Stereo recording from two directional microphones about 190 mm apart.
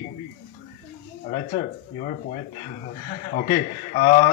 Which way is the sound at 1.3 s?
45° left (ahead or behind).